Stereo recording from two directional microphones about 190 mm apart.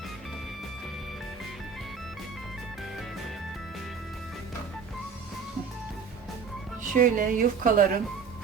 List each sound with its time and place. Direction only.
6.8 s a woman's voice: 45° right (ahead or behind)